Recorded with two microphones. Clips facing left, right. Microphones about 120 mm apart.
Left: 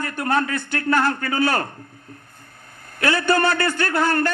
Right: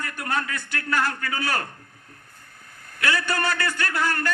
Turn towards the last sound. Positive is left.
turn(degrees=30)  # may be behind; listen again after turning